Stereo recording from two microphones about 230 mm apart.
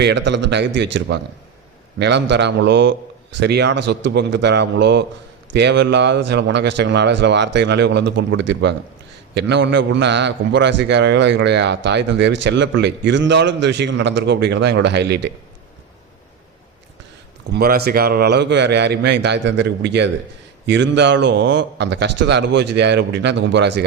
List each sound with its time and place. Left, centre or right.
0.0 s a man's voice: right
17.5 s a man's voice: right